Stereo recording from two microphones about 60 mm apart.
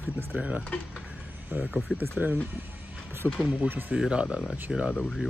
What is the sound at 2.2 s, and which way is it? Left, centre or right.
Speech, right.